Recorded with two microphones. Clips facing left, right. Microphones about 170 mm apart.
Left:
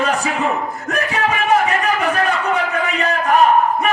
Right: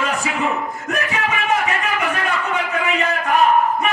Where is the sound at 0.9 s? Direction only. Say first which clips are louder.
Left 3 dB; 35° left (ahead or behind).